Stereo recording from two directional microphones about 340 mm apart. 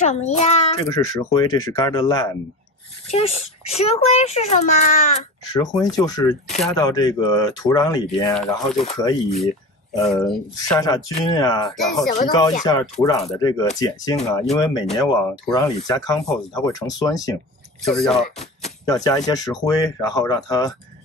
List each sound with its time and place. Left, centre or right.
0.0 s a child's voice: centre
10.0 s a child's voice: centre
11.7 s speech: centre
12.1 s a child's voice: centre
15.0 s a child's voice: centre
18.4 s a child's voice: centre